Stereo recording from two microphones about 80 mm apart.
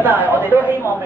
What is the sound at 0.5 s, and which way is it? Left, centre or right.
Speech, right.